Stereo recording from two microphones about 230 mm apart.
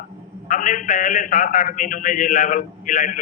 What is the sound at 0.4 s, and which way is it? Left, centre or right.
A man's voice, left.